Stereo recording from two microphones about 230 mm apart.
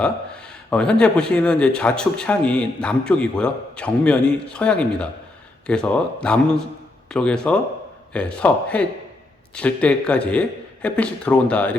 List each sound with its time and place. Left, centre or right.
0.0 s speech: centre